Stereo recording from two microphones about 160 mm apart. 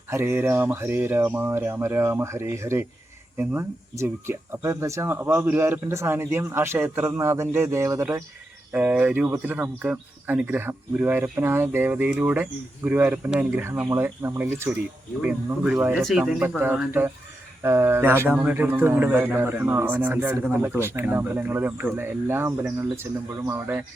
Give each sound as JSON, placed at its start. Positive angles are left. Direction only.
{"t": 0.1, "sound": "speech", "side_deg": -15}